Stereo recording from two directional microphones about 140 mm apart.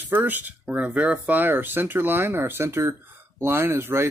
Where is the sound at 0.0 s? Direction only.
15° right (ahead or behind).